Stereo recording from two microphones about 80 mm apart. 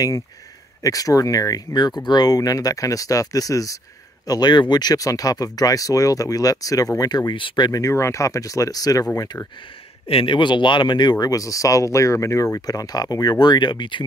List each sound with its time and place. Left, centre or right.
0.8 s speech: left
4.3 s speech: left
7.0 s speech: left
7.7 s speech: left
10.2 s speech: left